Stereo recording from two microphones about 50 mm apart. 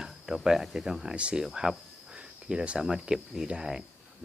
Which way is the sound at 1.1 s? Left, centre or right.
Right.